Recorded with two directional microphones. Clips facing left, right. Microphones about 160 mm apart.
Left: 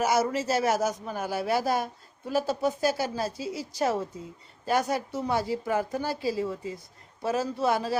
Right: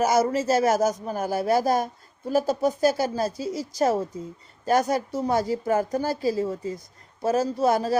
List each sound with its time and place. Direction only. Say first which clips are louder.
0.0 s a man's voice: right 4 dB; 45° right (ahead or behind)